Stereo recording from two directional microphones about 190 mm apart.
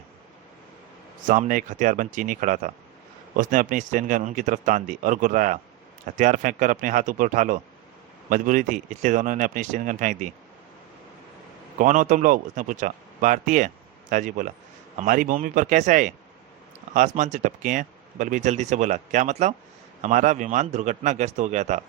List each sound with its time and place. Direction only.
1.3 s speech: 45° right (ahead or behind)
11.8 s speech: 40° right (ahead or behind)